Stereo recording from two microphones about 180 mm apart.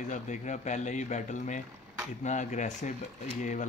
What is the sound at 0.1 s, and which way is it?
Speech, 40° left (ahead or behind).